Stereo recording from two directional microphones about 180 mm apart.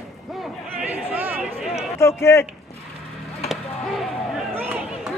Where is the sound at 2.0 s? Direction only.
15° left (ahead or behind).